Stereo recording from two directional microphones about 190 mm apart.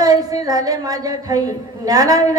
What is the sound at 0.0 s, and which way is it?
A woman's voice, 20° right (ahead or behind).